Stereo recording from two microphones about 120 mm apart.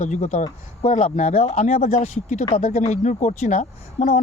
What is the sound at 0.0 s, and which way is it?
Speech, 80° left.